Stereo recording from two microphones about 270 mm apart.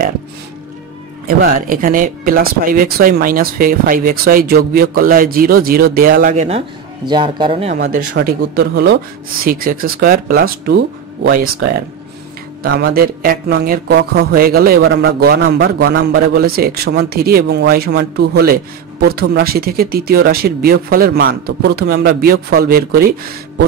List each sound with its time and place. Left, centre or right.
1.2 s a man's voice: right
7.8 s speech: right
12.6 s speech: right